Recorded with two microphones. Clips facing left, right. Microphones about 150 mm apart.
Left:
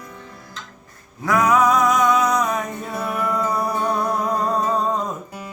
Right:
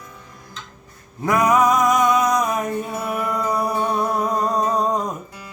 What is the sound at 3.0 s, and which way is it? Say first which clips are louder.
Music: left 5 dB; centre (ahead or behind).